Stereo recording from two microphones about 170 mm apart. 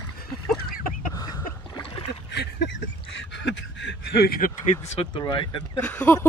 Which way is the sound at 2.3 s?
85° left.